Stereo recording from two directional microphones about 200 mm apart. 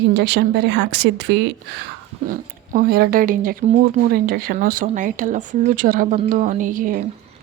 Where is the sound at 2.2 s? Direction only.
45° right (ahead or behind).